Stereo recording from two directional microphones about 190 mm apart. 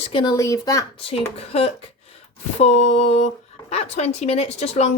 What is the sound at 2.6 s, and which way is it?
Speech, 35° left (ahead or behind).